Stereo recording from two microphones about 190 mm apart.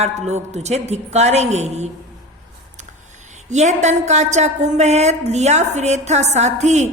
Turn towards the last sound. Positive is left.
turn(degrees=-35)  # may be behind; listen again after turning